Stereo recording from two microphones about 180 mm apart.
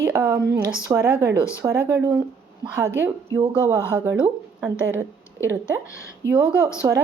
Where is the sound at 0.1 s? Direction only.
10° right (ahead or behind).